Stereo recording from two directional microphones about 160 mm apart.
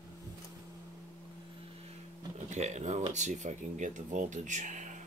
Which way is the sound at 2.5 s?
45° right (ahead or behind).